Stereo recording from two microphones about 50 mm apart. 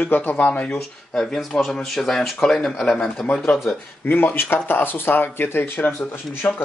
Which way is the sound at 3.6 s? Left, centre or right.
Left.